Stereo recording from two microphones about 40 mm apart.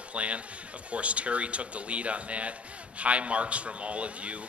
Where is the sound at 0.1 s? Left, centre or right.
Right.